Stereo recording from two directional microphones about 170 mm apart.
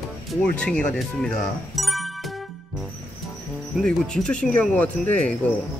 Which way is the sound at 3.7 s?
5° left (ahead or behind).